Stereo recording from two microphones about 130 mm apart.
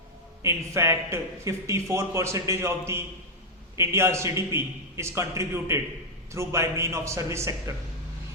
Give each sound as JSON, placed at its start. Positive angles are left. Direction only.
{"t": 0.4, "sound": "a man's voice", "side_deg": -20}